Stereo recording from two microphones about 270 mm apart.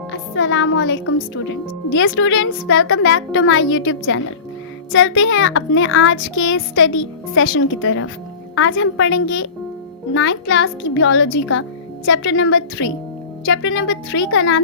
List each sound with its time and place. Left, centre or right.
0.1 s speech: left